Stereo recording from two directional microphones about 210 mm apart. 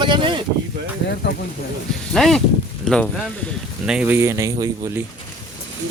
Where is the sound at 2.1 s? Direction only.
Centre (ahead or behind); by 5.0 s 15° right (ahead or behind).